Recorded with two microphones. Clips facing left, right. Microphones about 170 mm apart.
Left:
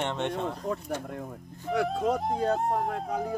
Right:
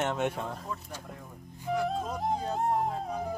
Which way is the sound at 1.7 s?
80° left.